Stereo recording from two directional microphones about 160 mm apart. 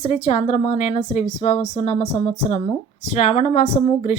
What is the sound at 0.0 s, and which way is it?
A woman's voice, 45° left (ahead or behind).